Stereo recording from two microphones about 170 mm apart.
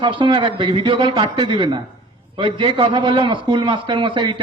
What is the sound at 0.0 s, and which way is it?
A man's voice, 30° right (ahead or behind).